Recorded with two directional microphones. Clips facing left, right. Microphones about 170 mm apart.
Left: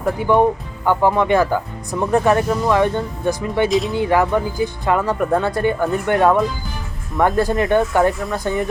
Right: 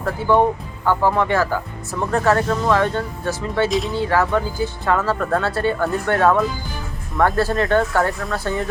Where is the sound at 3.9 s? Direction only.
15° left (ahead or behind).